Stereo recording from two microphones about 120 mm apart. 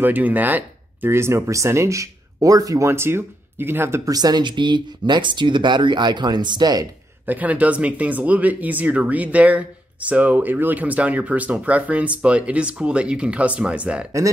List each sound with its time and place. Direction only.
0.0 s speech: 15° right (ahead or behind); by 6.9 s 35° right (ahead or behind)
7.2 s speech: 15° right (ahead or behind)